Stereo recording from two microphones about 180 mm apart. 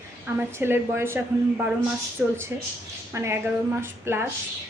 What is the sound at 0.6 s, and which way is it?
A woman's voice, 10° right (ahead or behind).